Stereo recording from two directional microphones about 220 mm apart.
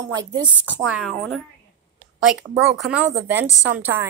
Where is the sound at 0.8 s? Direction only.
5° right (ahead or behind).